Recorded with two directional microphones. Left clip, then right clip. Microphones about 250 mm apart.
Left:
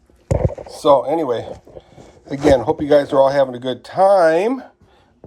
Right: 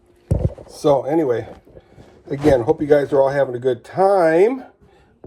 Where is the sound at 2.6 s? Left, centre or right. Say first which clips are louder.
Left 1 dB; left.